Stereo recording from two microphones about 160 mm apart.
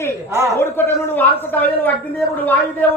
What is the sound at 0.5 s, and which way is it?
Speech, 15° left (ahead or behind).